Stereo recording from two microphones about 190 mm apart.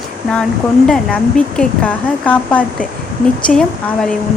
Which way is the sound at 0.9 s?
5° left (ahead or behind).